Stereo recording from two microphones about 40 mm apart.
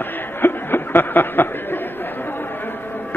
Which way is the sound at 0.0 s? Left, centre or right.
Left.